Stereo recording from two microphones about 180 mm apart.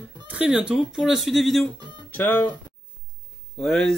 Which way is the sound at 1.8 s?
25° right (ahead or behind).